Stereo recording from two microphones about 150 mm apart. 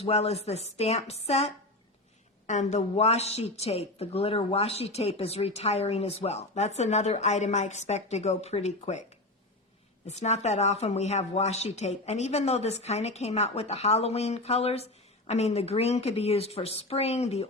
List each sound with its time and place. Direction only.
0.0 s a woman's voice: 45° left (ahead or behind)
2.5 s a woman's voice: 50° left (ahead or behind)
10.1 s a woman's voice: 50° left (ahead or behind)